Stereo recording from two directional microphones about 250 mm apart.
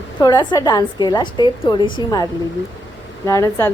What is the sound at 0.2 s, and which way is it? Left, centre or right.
A woman's voice, centre.